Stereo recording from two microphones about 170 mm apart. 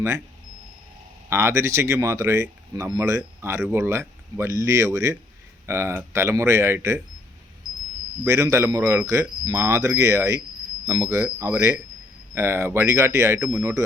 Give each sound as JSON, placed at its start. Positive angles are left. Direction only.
{"t": 1.3, "sound": "speech", "side_deg": -15}
{"t": 8.2, "sound": "speech", "side_deg": -15}